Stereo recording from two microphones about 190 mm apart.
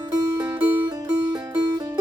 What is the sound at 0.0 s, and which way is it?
Music, 20° right (ahead or behind).